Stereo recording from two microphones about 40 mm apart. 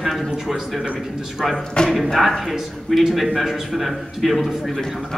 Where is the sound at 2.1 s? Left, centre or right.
Centre.